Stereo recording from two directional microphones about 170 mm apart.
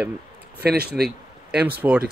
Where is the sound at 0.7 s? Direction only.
65° right (ahead or behind).